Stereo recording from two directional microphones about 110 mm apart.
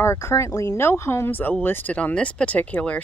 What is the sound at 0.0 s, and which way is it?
Speech, 25° left (ahead or behind).